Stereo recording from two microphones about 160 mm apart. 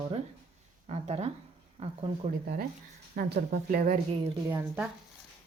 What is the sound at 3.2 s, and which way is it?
Speech, 65° right (ahead or behind).